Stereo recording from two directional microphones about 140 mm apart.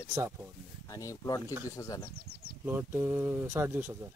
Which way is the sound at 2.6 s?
15° right (ahead or behind).